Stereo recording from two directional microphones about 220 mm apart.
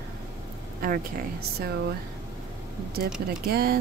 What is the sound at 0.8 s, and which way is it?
Speech, 40° right (ahead or behind).